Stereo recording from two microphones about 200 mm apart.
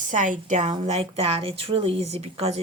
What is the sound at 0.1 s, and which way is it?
Speech, 40° right (ahead or behind).